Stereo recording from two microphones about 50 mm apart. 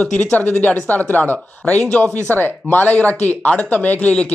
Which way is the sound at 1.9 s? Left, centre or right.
Left.